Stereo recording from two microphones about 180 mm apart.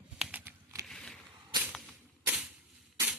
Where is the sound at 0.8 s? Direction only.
5° left (ahead or behind).